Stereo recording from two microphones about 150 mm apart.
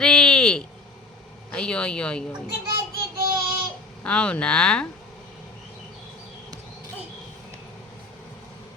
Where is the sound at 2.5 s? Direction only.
90° left.